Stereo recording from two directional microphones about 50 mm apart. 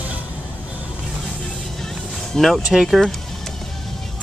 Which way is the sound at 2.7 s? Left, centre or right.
Centre.